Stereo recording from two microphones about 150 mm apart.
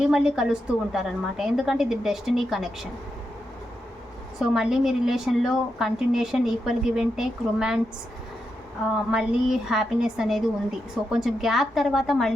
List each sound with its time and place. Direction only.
0.0 s a woman's voice: 5° right (ahead or behind)
4.4 s a woman's voice: 5° right (ahead or behind)
9.0 s a woman's voice: 5° right (ahead or behind)